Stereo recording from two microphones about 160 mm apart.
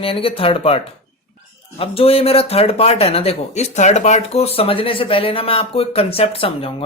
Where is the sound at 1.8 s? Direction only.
35° left (ahead or behind).